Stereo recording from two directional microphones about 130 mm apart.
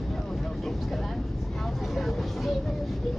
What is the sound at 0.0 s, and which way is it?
Vehicle, centre (ahead or behind).